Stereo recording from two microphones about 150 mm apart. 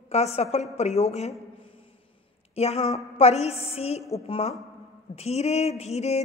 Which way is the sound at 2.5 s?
45° left (ahead or behind).